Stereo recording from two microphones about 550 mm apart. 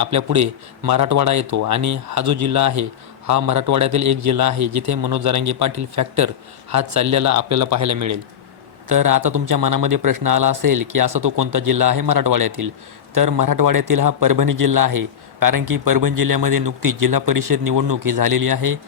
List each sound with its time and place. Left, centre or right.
0.0 s a man's voice: right